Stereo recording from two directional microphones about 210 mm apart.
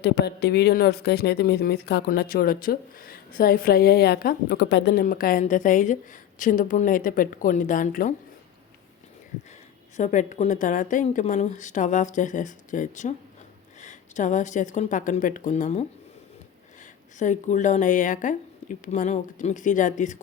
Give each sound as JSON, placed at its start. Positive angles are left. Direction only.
{"t": 0.0, "sound": "speech", "side_deg": 50}
{"t": 10.0, "sound": "a woman's voice", "side_deg": 35}
{"t": 17.2, "sound": "a woman's voice", "side_deg": 35}